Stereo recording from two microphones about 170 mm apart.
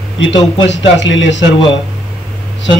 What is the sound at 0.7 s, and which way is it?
Speech, 90° left.